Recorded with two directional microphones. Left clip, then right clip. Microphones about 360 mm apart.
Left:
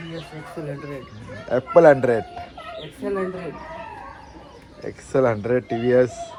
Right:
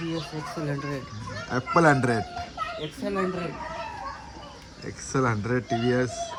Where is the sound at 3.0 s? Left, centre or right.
Right.